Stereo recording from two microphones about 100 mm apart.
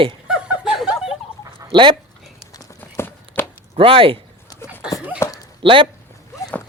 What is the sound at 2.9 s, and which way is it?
Walk, 25° left (ahead or behind).